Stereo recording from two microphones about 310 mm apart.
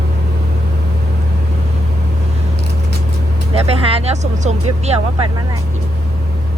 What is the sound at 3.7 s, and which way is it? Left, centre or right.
Vehicle, centre.